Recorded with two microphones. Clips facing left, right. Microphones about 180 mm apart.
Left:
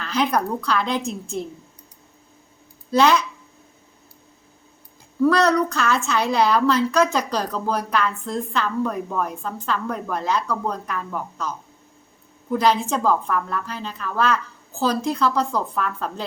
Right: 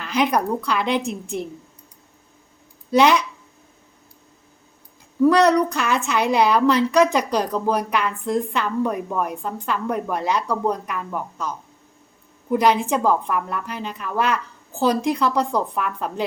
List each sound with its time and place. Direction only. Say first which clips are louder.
0.0 s a woman's voice: right 1 dB; 15° right (ahead or behind)
2.9 s a woman's voice: right 1 dB; 15° right (ahead or behind)
5.2 s a woman's voice: right 2 dB; 15° right (ahead or behind)